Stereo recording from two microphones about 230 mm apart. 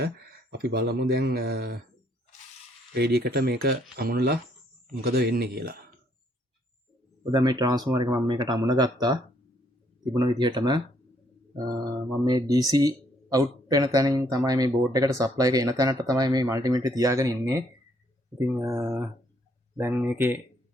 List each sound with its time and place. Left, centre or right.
0.5 s speech: right
2.9 s speech: right
7.3 s speech: centre
10.2 s speech: centre
12.2 s speech: centre